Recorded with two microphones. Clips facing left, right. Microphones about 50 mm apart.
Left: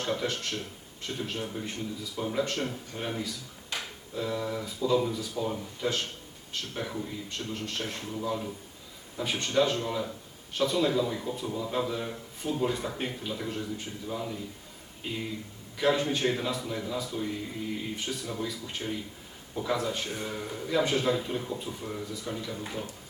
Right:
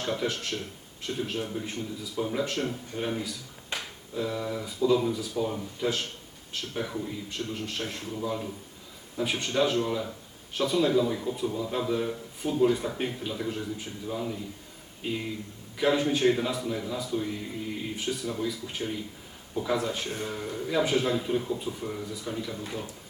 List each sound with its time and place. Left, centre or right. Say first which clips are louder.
0.0 s a man's voice: right 1 dB; centre
3.7 s a sound: right 1 dB; right
4.1 s a man's voice: right 1 dB; centre